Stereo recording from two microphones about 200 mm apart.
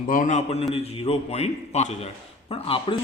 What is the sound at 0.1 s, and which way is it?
A man's voice, 40° left (ahead or behind).